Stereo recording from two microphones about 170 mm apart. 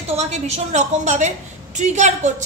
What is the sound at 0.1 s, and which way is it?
A woman's voice, 40° right (ahead or behind).